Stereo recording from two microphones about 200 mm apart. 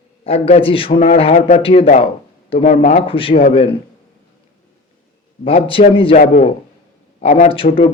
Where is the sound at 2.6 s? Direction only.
40° left (ahead or behind).